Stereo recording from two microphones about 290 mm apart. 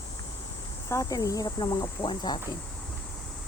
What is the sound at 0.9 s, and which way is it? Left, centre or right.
Speech, centre.